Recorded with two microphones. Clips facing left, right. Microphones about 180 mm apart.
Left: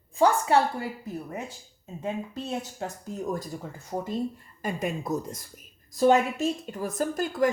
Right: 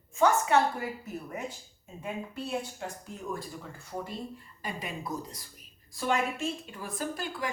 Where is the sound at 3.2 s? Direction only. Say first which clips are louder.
Left 4 dB; 40° left (ahead or behind).